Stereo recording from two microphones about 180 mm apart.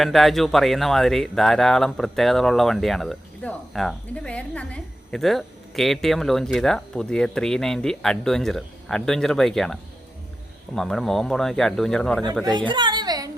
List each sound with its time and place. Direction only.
0.0 s speech: centre (ahead or behind)
10.8 s speech: centre (ahead or behind)
12.5 s a sound: 25° right (ahead or behind)